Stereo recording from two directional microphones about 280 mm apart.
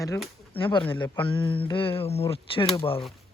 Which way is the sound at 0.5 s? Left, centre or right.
Centre.